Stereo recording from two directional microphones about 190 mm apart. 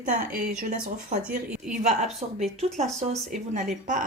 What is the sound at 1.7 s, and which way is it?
Speech, 40° right (ahead or behind).